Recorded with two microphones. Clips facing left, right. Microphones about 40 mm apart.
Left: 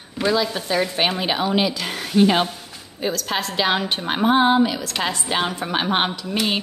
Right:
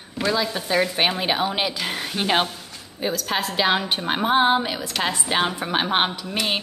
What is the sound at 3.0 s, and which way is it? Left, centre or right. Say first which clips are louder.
A woman's voice: left 1 dB; centre.